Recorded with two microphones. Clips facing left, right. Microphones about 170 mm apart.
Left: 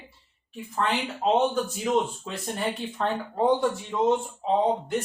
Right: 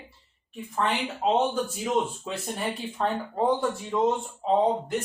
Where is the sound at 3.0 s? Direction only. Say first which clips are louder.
Even; 5° right (ahead or behind).